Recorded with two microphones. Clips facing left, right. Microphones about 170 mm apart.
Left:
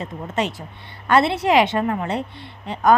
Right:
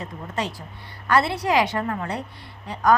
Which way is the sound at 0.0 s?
25° left (ahead or behind).